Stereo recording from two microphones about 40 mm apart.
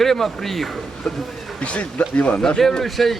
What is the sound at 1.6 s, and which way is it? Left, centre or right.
Speech, left.